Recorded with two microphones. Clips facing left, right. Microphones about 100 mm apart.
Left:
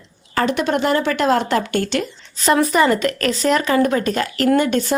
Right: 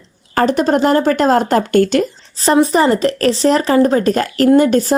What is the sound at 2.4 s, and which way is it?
Speech, 30° right (ahead or behind).